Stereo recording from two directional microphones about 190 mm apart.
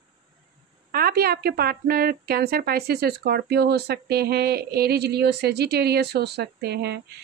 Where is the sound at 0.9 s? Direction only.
55° right (ahead or behind).